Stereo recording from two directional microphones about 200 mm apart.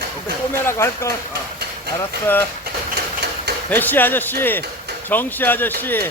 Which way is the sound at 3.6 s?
10° left (ahead or behind).